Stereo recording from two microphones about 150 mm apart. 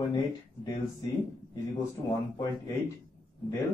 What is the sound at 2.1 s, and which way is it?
Speech, 25° left (ahead or behind).